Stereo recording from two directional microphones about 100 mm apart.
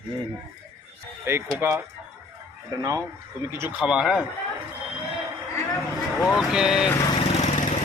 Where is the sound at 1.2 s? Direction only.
25° right (ahead or behind).